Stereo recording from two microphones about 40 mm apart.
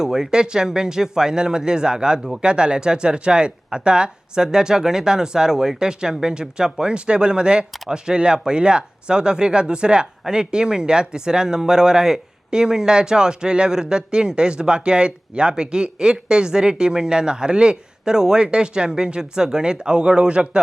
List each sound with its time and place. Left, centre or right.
0.0 s speech: centre